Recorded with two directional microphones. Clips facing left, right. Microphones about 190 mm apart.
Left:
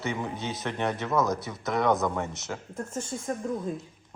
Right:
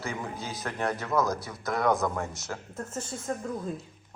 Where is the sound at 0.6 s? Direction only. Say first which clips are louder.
Left 1 dB; centre (ahead or behind).